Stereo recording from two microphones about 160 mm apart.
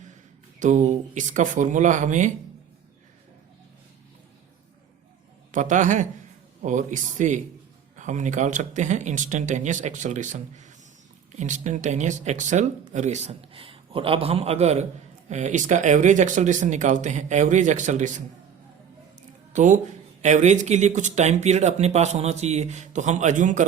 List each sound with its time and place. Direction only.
0.6 s speech: 50° right (ahead or behind)
5.5 s a man's voice: 50° right (ahead or behind)
19.5 s speech: 50° right (ahead or behind)